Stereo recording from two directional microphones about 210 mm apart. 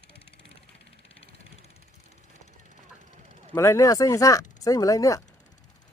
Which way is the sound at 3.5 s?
15° left (ahead or behind).